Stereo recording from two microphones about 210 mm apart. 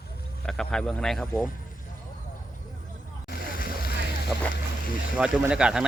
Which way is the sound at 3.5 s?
45° left (ahead or behind).